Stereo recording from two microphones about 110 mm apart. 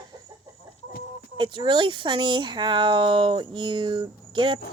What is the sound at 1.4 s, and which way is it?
Speech, 45° right (ahead or behind).